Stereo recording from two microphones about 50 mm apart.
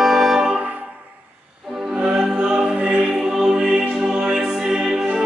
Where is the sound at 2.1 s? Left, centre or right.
Centre.